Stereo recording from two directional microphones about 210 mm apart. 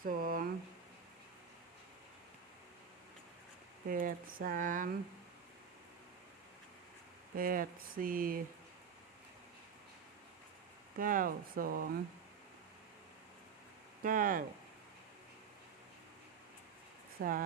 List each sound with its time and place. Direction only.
0.0 s a sound: 40° right (ahead or behind)
3.8 s speech: 40° right (ahead or behind)
7.3 s speech: 40° right (ahead or behind)
10.9 s speech: 40° right (ahead or behind)
14.0 s speech: 40° right (ahead or behind)
17.2 s speech: 45° right (ahead or behind)